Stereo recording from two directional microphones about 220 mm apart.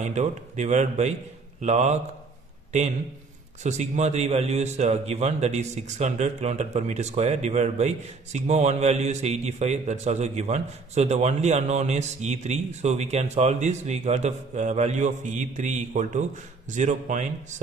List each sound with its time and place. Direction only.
0.0 s a man's voice: 30° right (ahead or behind)
3.6 s a man's voice: 30° right (ahead or behind)